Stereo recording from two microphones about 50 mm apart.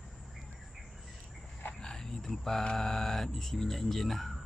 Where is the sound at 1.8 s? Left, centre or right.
Centre.